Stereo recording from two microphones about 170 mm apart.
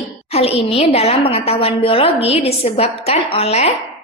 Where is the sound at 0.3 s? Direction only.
35° left (ahead or behind).